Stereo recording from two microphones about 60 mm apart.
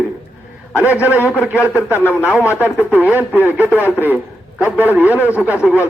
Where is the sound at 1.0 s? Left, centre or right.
Right.